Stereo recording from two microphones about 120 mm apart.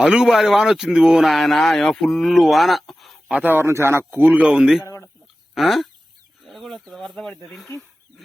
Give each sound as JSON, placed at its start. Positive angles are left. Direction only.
{"t": 0.0, "sound": "speech", "side_deg": -5}
{"t": 3.3, "sound": "a man's voice", "side_deg": -15}
{"t": 4.8, "sound": "a sound", "side_deg": 25}
{"t": 5.5, "sound": "speech", "side_deg": 0}